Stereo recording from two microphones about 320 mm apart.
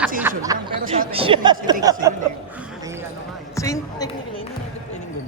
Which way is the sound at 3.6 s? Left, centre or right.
Centre.